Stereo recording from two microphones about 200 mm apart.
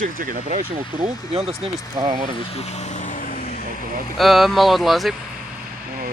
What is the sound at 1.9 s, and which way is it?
Speech, 20° right (ahead or behind).